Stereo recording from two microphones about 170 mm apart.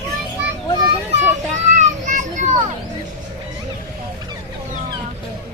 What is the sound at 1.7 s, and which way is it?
Children playing, 45° right (ahead or behind).